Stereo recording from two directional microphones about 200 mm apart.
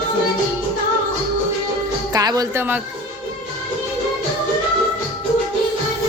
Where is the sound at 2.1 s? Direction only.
20° right (ahead or behind).